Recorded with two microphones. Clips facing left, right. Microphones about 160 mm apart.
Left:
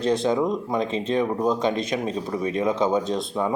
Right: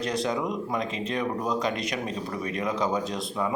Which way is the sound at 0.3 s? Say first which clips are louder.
Left 6 dB; 25° left (ahead or behind).